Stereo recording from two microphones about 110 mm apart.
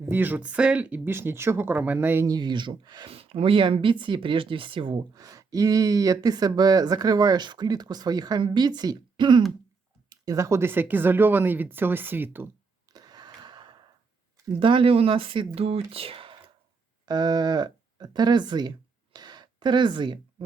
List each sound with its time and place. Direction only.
0.0 s speech: 20° right (ahead or behind)
2.2 s speech: 40° right (ahead or behind)
3.1 s speech: 60° right (ahead or behind)
5.1 s speech: 35° right (ahead or behind)
10.1 s speech: 30° right (ahead or behind)
12.9 s a sound: 40° right (ahead or behind)
14.6 s speech: 50° right (ahead or behind)
15.5 s speech: 65° right (ahead or behind)
17.1 s speech: 40° right (ahead or behind)
19.1 s a sound: 40° right (ahead or behind)